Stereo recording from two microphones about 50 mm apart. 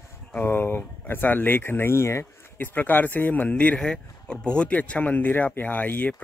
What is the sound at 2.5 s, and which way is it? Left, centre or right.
Speech, left.